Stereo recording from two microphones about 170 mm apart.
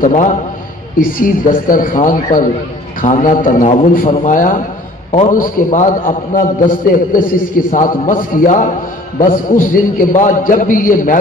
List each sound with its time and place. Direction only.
0.0 s a man's voice: 50° left (ahead or behind)